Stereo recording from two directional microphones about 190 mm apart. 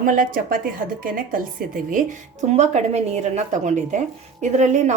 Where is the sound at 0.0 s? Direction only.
45° right (ahead or behind).